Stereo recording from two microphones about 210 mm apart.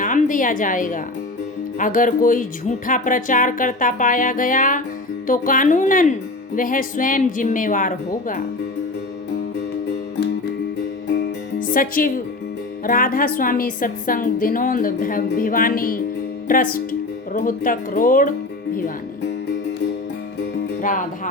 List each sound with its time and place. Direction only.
0.0 s a woman's voice: 40° left (ahead or behind)
11.7 s speech: 40° left (ahead or behind)